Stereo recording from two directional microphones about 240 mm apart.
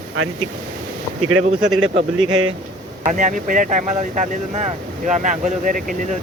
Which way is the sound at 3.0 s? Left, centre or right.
Right.